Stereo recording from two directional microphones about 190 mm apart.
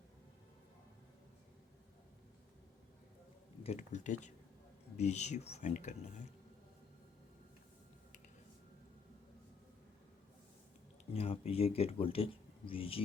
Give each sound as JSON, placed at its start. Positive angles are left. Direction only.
{"t": 3.6, "sound": "speech", "side_deg": 35}
{"t": 11.1, "sound": "speech", "side_deg": 30}